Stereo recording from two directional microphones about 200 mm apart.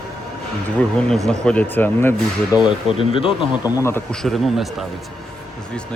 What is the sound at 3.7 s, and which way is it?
Speech, 10° left (ahead or behind).